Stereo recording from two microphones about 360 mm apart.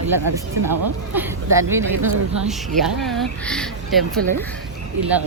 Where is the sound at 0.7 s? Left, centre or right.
Centre.